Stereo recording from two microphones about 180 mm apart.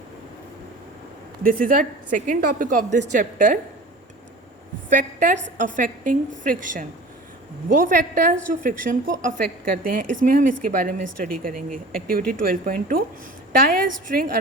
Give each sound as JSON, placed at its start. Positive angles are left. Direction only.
{"t": 1.5, "sound": "a woman's voice", "side_deg": -50}
{"t": 4.9, "sound": "a woman's voice", "side_deg": -45}